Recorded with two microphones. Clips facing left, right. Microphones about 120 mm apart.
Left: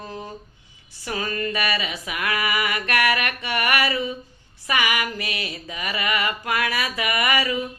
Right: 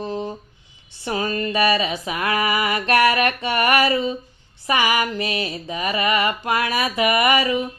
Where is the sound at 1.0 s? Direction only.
25° right (ahead or behind).